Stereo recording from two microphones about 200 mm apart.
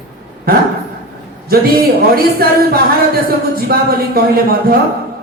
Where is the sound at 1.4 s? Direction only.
50° right (ahead or behind).